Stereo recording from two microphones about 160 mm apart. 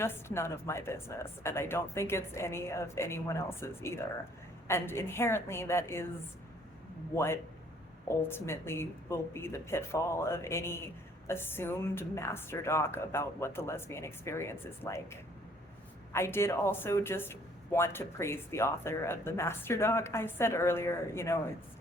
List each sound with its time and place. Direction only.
0.0 s speech: 15° left (ahead or behind)
8.3 s speech: 15° left (ahead or behind)